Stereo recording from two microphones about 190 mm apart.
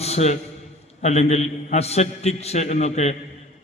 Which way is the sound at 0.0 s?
35° left (ahead or behind).